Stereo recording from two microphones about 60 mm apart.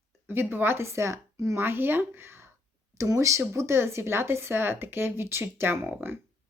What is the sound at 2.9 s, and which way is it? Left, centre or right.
Speech, right.